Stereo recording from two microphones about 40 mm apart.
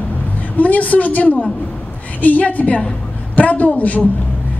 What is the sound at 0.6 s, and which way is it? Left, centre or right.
A woman's voice, left.